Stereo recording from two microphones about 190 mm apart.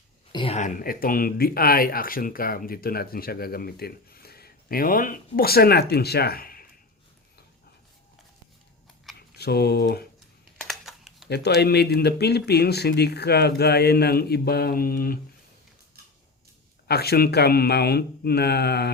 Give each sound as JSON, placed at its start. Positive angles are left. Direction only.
{"t": 0.3, "sound": "speech", "side_deg": 35}
{"t": 9.3, "sound": "speech", "side_deg": 55}
{"t": 10.7, "sound": "a sound", "side_deg": 0}
{"t": 11.3, "sound": "speech", "side_deg": 60}
{"t": 16.8, "sound": "speech", "side_deg": 55}